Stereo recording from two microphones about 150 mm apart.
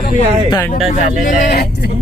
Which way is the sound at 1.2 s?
80° left.